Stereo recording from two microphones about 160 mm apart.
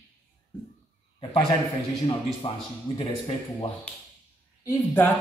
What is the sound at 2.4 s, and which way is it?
Speech, 35° left (ahead or behind).